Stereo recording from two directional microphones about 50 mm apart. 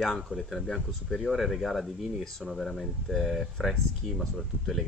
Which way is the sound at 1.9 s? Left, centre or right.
Centre.